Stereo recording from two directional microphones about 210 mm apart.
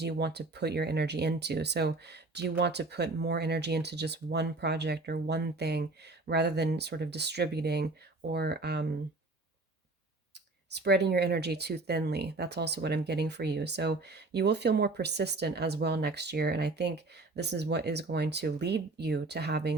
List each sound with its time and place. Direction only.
0.0 s speech: 50° right (ahead or behind)
10.8 s speech: 50° right (ahead or behind)